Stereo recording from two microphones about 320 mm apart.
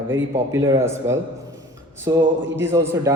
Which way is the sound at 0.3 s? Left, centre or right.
Centre.